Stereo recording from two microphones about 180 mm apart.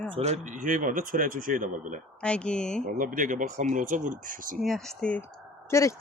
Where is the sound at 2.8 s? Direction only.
50° right (ahead or behind).